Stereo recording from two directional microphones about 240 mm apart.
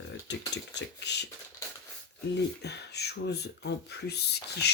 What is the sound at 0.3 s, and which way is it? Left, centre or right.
Speech, left.